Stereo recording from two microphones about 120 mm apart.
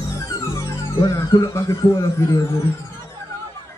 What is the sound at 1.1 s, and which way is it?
Speech, 25° left (ahead or behind).